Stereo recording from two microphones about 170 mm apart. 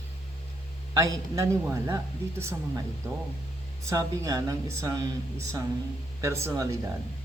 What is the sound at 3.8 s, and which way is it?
Speech, 20° right (ahead or behind).